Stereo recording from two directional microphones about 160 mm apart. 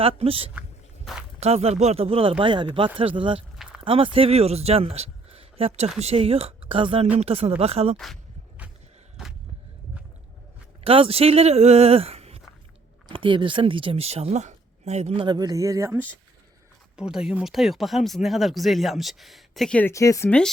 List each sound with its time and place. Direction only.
0.0 s speech: 35° right (ahead or behind)
7.9 s speech: centre (ahead or behind)
10.8 s speech: 35° right (ahead or behind); by 16.0 s 15° right (ahead or behind)
17.0 s speech: 5° right (ahead or behind)
19.9 s speech: 20° left (ahead or behind)